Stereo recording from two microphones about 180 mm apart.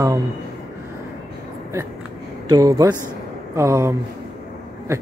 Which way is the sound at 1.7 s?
15° right (ahead or behind).